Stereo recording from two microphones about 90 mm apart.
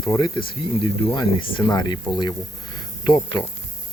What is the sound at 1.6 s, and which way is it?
Speech, 50° left (ahead or behind).